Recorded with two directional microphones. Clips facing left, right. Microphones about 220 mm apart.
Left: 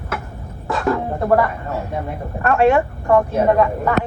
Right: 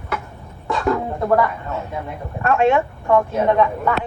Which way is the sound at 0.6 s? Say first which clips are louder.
Even; centre (ahead or behind).